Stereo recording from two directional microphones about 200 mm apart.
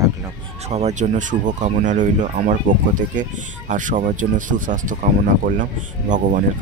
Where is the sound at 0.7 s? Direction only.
35° right (ahead or behind).